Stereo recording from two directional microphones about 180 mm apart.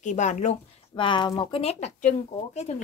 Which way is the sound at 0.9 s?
25° left (ahead or behind).